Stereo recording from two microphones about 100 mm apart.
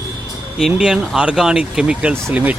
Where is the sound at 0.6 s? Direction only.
5° right (ahead or behind).